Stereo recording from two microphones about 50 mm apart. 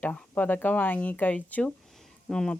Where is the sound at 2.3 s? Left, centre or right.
Centre.